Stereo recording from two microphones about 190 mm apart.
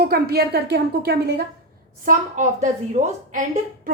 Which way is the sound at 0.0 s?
55° right (ahead or behind).